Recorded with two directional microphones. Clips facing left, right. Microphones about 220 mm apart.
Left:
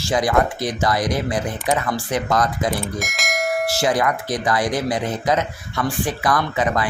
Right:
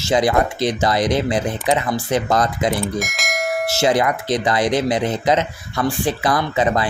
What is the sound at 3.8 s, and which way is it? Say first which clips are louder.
Speech: right 4 dB; 25° right (ahead or behind).